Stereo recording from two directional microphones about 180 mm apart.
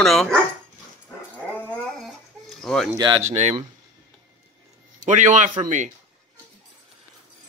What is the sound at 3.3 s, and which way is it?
Speech, 35° right (ahead or behind).